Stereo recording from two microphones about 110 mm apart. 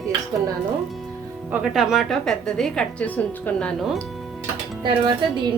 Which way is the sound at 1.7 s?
5° right (ahead or behind).